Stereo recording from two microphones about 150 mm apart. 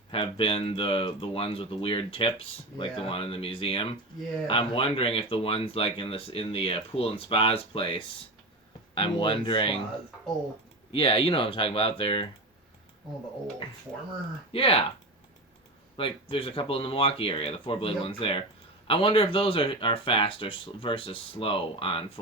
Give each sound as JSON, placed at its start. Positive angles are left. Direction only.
{"t": 0.1, "sound": "speech", "side_deg": 40}
{"t": 10.9, "sound": "speech", "side_deg": 35}
{"t": 14.5, "sound": "speech", "side_deg": 40}
{"t": 16.0, "sound": "speech", "side_deg": 35}